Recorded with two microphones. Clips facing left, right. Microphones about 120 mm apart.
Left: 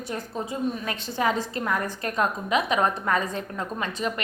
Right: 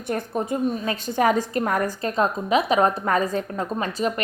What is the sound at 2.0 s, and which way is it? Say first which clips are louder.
A woman's voice: right 2 dB; 30° right (ahead or behind).